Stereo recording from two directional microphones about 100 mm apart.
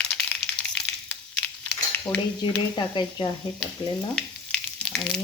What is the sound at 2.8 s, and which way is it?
Speech, 50° left (ahead or behind).